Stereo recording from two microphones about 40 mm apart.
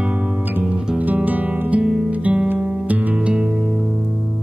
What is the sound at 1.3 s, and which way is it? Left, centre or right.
Music, right.